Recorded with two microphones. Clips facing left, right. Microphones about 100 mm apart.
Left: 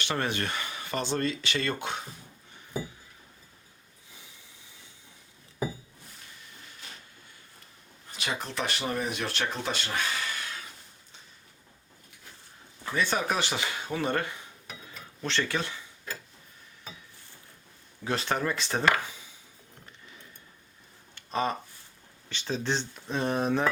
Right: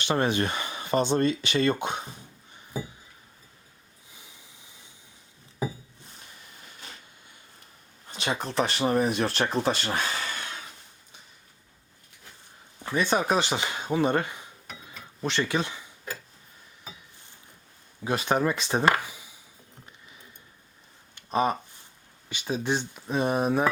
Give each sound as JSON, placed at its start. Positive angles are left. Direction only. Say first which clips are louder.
{"t": 0.0, "sound": "speech", "louder": "right 5 dB", "side_deg": -20}
{"t": 8.1, "sound": "speech", "louder": "right 6 dB", "side_deg": -25}
{"t": 12.8, "sound": "speech", "louder": "right 3 dB", "side_deg": -20}
{"t": 15.2, "sound": "a sound", "louder": "right 3 dB", "side_deg": -15}
{"t": 18.0, "sound": "speech", "louder": "right 4 dB", "side_deg": -15}
{"t": 21.2, "sound": "a sound", "louder": "right 4 dB", "side_deg": -15}
{"t": 22.3, "sound": "speech", "louder": "right 2 dB", "side_deg": -15}